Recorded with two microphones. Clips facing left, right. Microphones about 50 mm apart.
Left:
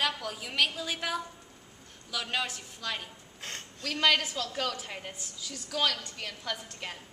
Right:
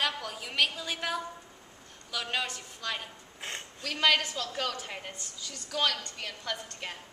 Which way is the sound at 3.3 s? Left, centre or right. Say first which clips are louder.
Right 2 dB; centre.